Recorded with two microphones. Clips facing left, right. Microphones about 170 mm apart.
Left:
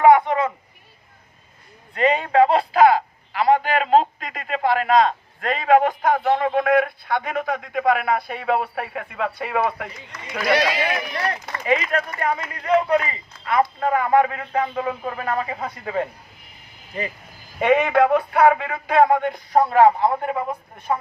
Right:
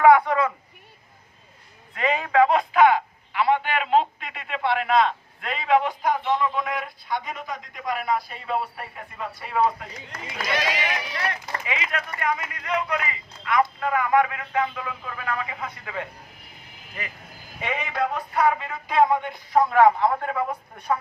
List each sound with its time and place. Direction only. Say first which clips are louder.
0.0 s a sound: left 2 dB; 20° left (ahead or behind)
2.0 s speech: left 3 dB; 35° left (ahead or behind); by 9.9 s 70° left (ahead or behind)
10.4 s speech: left 7 dB; 45° left (ahead or behind)
17.6 s speech: left 11 dB; 60° left (ahead or behind); by 19.7 s 40° left (ahead or behind)
19.7 s a man's voice: left 2 dB; 25° left (ahead or behind)